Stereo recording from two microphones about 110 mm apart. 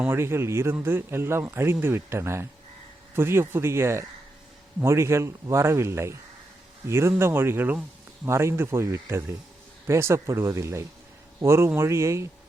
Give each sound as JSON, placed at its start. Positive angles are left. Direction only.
{"t": 0.0, "sound": "speech", "side_deg": -20}